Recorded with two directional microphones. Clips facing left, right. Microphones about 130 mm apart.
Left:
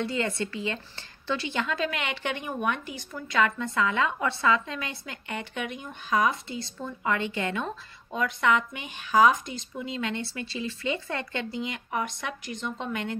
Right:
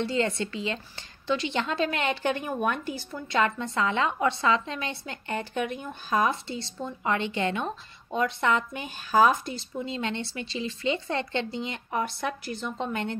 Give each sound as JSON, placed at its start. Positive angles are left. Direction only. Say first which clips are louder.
{"t": 0.0, "sound": "speech", "louder": "right 2 dB", "side_deg": -25}